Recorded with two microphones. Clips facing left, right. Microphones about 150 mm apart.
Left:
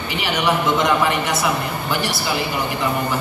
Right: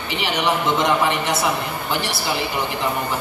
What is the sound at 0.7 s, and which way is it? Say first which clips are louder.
A man's voice: left 1 dB; 25° right (ahead or behind).